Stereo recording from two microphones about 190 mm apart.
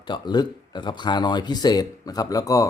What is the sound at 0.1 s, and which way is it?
Speech, 20° left (ahead or behind).